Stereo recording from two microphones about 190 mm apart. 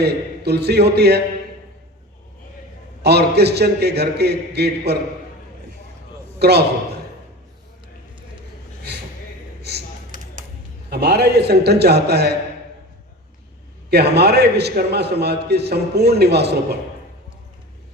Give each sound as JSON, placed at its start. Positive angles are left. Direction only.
{"t": 0.0, "sound": "a man's voice", "side_deg": -60}
{"t": 3.0, "sound": "a man's voice", "side_deg": -60}
{"t": 6.4, "sound": "a man's voice", "side_deg": -60}
{"t": 10.8, "sound": "a man's voice", "side_deg": -60}
{"t": 13.9, "sound": "a man's voice", "side_deg": -60}